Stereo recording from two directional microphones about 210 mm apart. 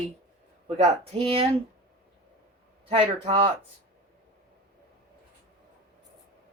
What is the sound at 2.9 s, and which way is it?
Speech, 25° right (ahead or behind).